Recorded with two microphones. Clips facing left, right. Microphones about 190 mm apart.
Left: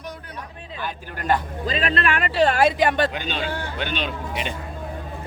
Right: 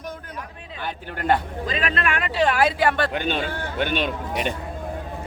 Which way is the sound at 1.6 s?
30° left (ahead or behind).